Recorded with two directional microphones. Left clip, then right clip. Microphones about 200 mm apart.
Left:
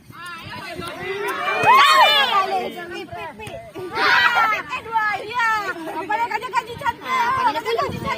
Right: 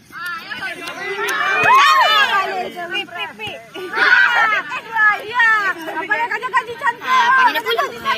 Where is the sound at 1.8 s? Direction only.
45° left (ahead or behind).